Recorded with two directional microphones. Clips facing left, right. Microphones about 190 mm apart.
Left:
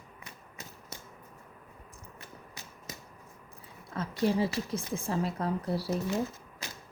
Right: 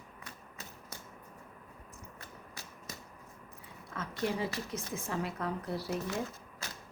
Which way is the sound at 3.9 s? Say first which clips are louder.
Left 6 dB; 35° left (ahead or behind).